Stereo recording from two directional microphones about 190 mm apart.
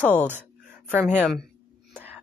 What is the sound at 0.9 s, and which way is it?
Speech, 10° right (ahead or behind).